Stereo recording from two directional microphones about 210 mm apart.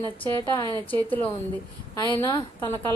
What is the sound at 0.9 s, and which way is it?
A woman's voice, 10° left (ahead or behind).